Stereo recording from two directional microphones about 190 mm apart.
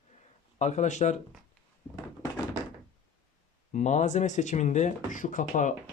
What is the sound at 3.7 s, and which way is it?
Speech, 40° left (ahead or behind).